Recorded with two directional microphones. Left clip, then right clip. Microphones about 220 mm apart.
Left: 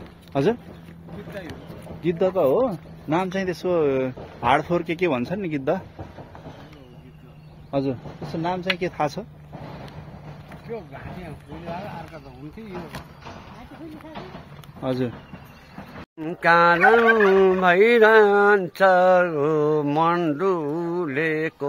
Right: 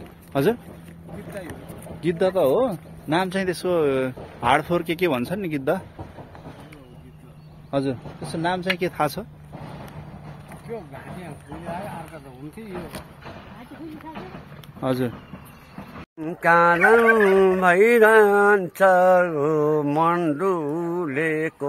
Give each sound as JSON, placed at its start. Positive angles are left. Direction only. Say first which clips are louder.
{"t": 0.3, "sound": "speech", "louder": "even", "side_deg": -5}
{"t": 2.0, "sound": "speech", "louder": "right 1 dB", "side_deg": -15}
{"t": 7.7, "sound": "speech", "louder": "even", "side_deg": -15}
{"t": 8.6, "sound": "speech", "louder": "right 1 dB", "side_deg": -5}
{"t": 10.7, "sound": "speech", "louder": "even", "side_deg": 0}
{"t": 16.2, "sound": "speech", "louder": "even", "side_deg": 5}